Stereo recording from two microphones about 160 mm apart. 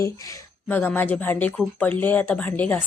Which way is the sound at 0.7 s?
10° left (ahead or behind).